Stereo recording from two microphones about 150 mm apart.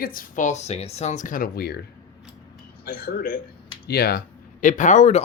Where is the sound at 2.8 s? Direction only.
90° left.